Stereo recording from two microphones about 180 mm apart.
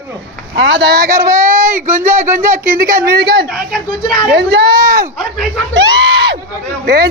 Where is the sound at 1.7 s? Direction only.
50° right (ahead or behind).